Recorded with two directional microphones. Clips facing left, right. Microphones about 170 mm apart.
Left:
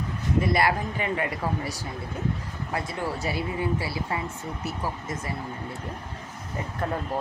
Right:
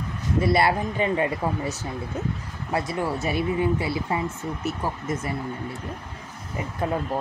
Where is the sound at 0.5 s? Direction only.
25° right (ahead or behind).